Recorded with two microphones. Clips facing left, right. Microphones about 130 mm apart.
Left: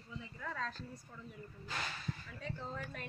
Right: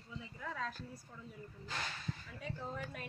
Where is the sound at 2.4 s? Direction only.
15° right (ahead or behind).